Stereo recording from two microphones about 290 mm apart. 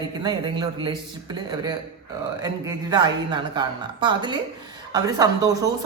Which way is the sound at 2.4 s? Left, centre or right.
Centre.